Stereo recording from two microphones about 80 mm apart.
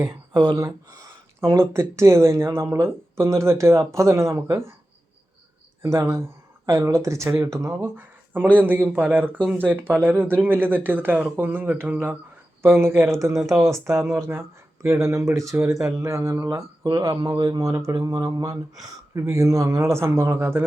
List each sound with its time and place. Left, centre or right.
0.0 s a sound: right
0.4 s speech: right
1.4 s speech: right
5.8 s speech: right
7.9 s speech: right
17.1 s a man's voice: right
17.6 s speech: right
18.1 s speech: right
19.3 s speech: right